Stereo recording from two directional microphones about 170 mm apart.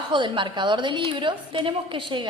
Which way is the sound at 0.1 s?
30° right (ahead or behind).